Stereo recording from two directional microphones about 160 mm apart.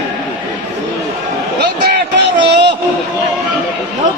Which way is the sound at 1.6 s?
90° right.